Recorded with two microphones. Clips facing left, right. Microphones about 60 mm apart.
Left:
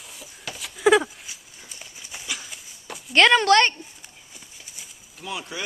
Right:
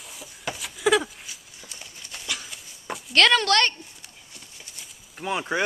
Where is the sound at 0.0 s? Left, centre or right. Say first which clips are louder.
Right 4 dB; centre.